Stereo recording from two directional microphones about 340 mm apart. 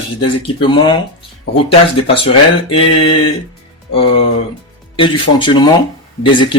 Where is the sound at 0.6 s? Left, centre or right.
Centre.